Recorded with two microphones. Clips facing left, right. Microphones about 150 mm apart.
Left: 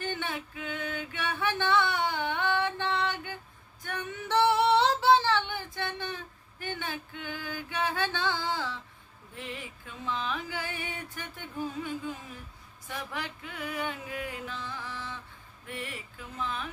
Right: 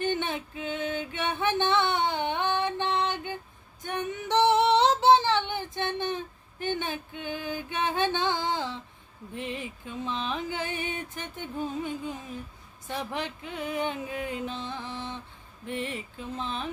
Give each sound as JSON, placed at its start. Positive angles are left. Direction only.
{"t": 0.0, "sound": "music", "side_deg": -20}
{"t": 3.8, "sound": "female singing", "side_deg": -20}
{"t": 9.3, "sound": "music", "side_deg": -20}